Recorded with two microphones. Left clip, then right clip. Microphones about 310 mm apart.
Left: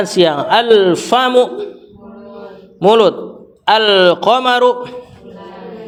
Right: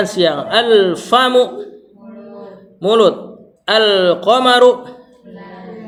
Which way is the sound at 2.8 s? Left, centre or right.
Centre.